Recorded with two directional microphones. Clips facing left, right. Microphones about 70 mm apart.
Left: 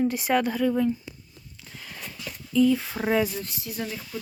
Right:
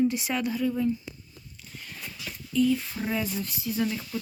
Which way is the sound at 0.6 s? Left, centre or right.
Left.